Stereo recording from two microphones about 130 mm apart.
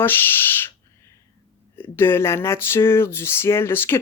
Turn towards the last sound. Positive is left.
turn(degrees=20)  # may be behind; listen again after turning